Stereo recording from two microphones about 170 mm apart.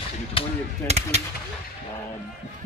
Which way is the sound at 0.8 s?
40° right (ahead or behind).